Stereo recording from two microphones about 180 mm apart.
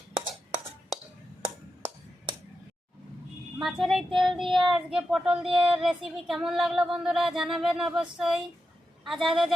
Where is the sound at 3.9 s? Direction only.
Centre (ahead or behind).